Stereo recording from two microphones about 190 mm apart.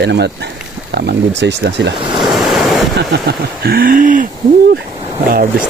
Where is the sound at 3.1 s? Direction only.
55° right (ahead or behind).